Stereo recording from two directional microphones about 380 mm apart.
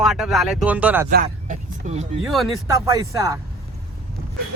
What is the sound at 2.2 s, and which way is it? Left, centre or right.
Speech, centre.